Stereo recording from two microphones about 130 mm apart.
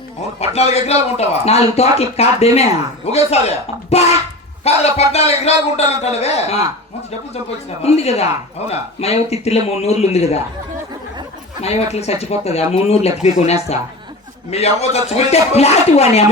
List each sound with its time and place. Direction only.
0.3 s a man's voice: 55° left (ahead or behind)
7.8 s a man's voice: 55° left (ahead or behind)
11.6 s speech: 55° left (ahead or behind)